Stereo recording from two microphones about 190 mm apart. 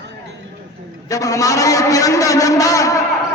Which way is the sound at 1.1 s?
15° left (ahead or behind).